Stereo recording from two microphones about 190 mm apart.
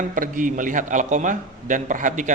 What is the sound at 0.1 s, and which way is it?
A man's voice, 45° right (ahead or behind).